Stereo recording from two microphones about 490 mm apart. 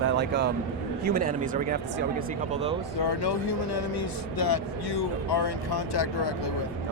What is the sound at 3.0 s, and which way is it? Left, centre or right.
Speech, left.